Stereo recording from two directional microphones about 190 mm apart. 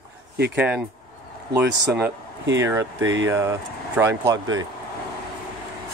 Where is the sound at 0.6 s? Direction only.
5° right (ahead or behind).